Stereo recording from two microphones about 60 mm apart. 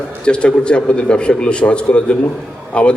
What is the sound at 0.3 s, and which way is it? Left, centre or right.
A man's voice, centre.